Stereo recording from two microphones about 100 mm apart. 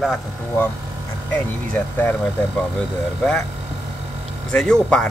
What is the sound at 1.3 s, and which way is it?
Speech, 15° left (ahead or behind).